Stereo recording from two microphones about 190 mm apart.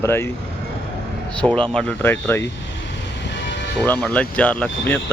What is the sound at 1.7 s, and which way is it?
Speech, 10° left (ahead or behind).